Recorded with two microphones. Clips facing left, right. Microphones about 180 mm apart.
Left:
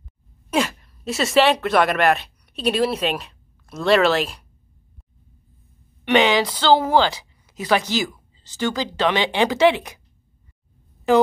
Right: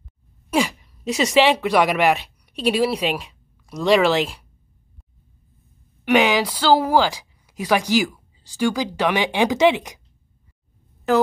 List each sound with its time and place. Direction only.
0.5 s speech: 10° right (ahead or behind)
6.0 s speech: 10° right (ahead or behind)